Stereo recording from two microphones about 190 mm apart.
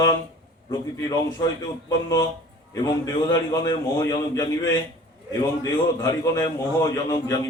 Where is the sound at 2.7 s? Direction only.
20° left (ahead or behind).